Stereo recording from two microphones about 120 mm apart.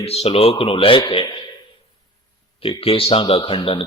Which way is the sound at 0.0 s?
55° left (ahead or behind).